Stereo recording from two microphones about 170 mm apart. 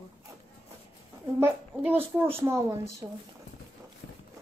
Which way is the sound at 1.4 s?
10° right (ahead or behind).